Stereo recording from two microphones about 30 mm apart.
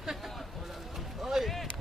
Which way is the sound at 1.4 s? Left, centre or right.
Centre.